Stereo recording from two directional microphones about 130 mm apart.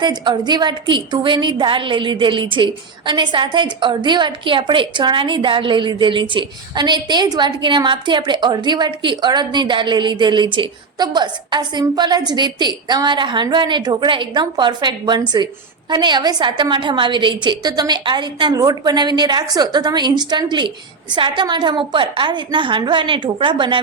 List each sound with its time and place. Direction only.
0.0 s a woman's voice: 35° right (ahead or behind)